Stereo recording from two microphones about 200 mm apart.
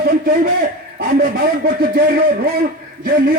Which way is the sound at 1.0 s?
50° right (ahead or behind).